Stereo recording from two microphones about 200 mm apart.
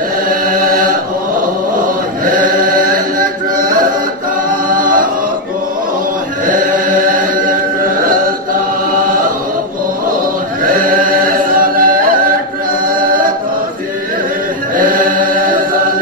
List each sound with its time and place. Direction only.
0.3 s chant: 45° right (ahead or behind)
2.2 s chant: 40° right (ahead or behind)
4.5 s a capella: 45° right (ahead or behind)
6.4 s chant: 40° right (ahead or behind)
10.6 s chant: 45° right (ahead or behind)
12.8 s choir: 45° right (ahead or behind)
14.8 s chant: 45° right (ahead or behind)